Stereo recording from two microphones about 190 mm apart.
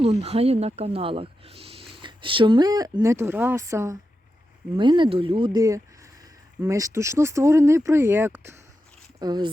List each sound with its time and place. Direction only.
0.0 s speech: 30° right (ahead or behind)